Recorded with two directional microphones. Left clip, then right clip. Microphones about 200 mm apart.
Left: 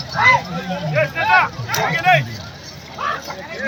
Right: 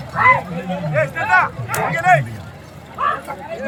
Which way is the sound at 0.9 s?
20° right (ahead or behind).